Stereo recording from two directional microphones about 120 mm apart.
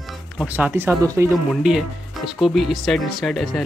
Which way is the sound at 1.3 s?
5° right (ahead or behind).